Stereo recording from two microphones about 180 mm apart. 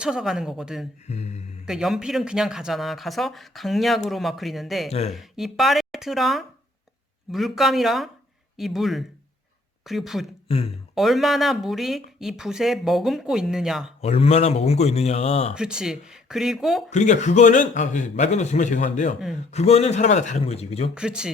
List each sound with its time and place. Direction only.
0.0 s speech: 5° right (ahead or behind)
1.0 s speech: 40° left (ahead or behind)
1.6 s speech: centre (ahead or behind)
4.9 s speech: 35° left (ahead or behind)
5.1 s speech: centre (ahead or behind)
10.5 s speech: 35° left (ahead or behind)
10.9 s speech: centre (ahead or behind)
14.0 s speech: 35° left (ahead or behind)
15.5 s speech: 5° right (ahead or behind)
16.9 s a man's voice: 40° left (ahead or behind)
20.9 s speech: 5° right (ahead or behind)